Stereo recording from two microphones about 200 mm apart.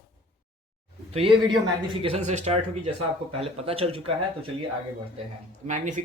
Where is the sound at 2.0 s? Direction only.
30° right (ahead or behind).